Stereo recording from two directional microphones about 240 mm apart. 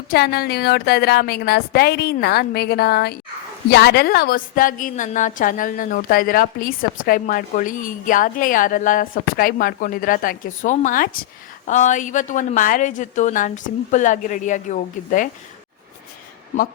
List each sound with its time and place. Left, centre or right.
0.1 s a woman's voice: left